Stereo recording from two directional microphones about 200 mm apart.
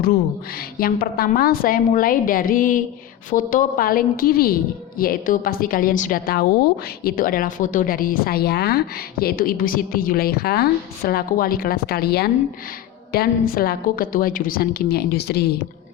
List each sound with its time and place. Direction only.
0.8 s a woman's voice: 45° left (ahead or behind)